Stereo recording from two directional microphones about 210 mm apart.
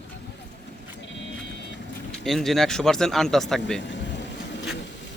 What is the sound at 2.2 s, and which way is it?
Speech, centre (ahead or behind).